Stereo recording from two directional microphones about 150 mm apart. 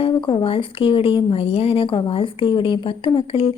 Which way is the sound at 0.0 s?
35° left (ahead or behind).